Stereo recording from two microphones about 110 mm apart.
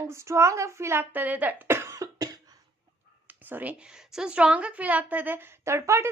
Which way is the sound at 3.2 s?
15° right (ahead or behind).